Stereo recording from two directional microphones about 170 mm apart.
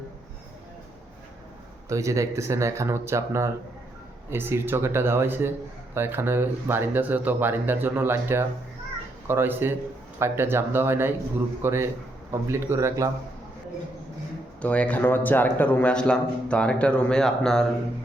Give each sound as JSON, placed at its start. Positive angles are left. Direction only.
{"t": 1.9, "sound": "speech", "side_deg": -20}
{"t": 14.6, "sound": "a man's voice", "side_deg": 10}